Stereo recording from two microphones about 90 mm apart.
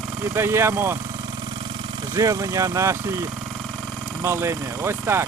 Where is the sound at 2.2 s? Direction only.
40° right (ahead or behind).